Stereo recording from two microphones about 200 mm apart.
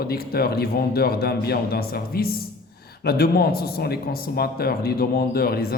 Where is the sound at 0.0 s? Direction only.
50° left (ahead or behind).